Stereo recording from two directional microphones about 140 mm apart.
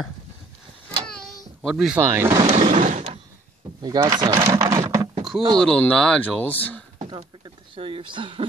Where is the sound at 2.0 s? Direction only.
20° right (ahead or behind).